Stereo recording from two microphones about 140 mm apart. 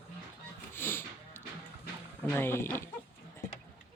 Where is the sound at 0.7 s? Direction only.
15° left (ahead or behind).